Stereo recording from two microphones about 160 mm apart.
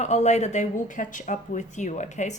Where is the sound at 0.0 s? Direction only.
45° left (ahead or behind).